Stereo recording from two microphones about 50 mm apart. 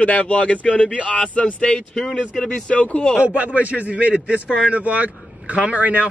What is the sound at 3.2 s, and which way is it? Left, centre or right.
Speech, right.